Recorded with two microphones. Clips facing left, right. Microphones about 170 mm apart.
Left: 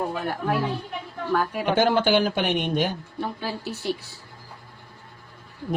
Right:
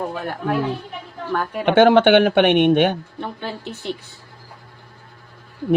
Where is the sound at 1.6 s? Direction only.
70° right (ahead or behind).